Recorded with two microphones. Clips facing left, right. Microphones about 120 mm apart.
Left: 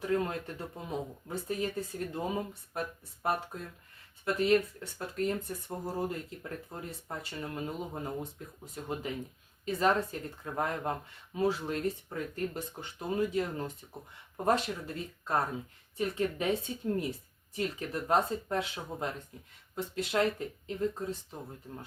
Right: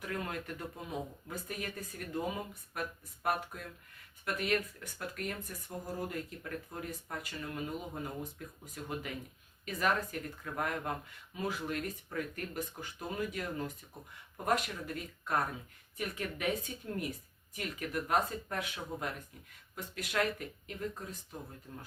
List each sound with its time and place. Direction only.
0.0 s speech: 25° left (ahead or behind)
4.3 s speech: 30° left (ahead or behind)